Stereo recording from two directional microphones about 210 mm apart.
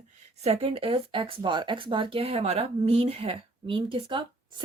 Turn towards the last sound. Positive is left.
turn(degrees=-25)  # may be behind; listen again after turning